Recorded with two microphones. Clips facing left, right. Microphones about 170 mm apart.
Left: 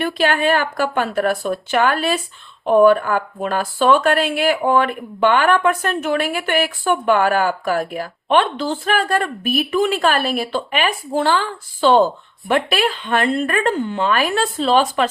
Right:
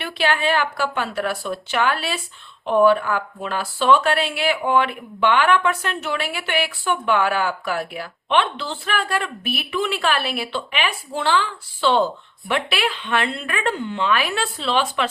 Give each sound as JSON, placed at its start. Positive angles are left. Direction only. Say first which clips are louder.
{"t": 0.0, "sound": "speech", "louder": "left 4 dB", "side_deg": 45}